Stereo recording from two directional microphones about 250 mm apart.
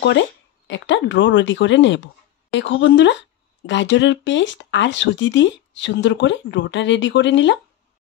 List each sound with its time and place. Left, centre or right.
0.7 s speech: left